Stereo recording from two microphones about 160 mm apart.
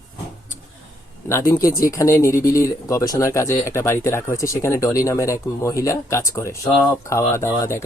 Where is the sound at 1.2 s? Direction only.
20° left (ahead or behind).